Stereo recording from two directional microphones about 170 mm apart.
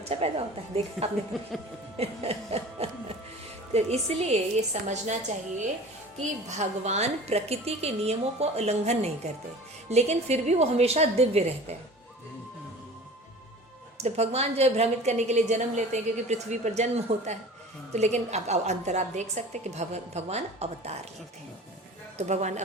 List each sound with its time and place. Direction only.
0.0 s a woman's voice: 35° right (ahead or behind)
6.6 s a woman's voice: 40° right (ahead or behind)
14.0 s a woman's voice: 40° right (ahead or behind)
22.2 s speech: 40° right (ahead or behind)